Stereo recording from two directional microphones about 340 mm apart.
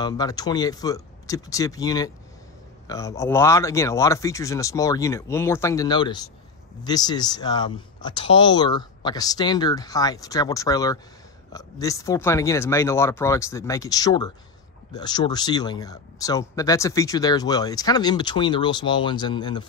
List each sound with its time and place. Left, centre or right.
0.0 s speech: centre